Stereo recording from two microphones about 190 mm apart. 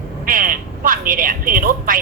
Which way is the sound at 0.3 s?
45° right (ahead or behind).